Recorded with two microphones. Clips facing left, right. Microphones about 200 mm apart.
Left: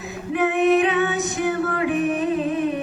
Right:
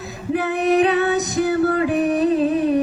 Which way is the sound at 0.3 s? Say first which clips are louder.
Even; 35° right (ahead or behind).